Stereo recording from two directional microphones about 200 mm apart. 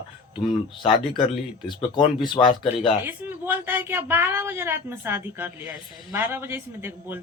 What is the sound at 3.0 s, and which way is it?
Speech, 10° right (ahead or behind).